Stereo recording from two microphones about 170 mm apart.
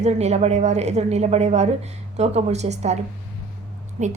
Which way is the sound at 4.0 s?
45° right (ahead or behind).